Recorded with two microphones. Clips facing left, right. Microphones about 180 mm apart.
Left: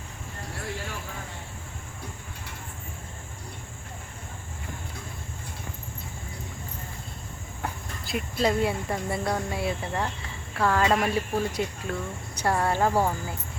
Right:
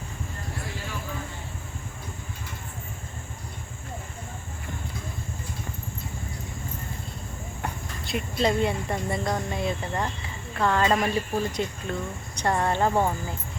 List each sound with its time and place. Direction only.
7.6 s speech: centre (ahead or behind)